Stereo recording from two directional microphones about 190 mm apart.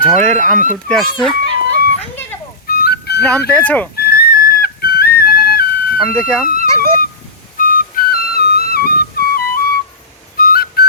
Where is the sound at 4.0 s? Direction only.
50° left (ahead or behind).